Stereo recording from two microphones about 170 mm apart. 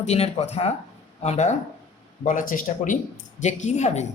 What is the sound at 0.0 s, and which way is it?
Speech, 40° left (ahead or behind).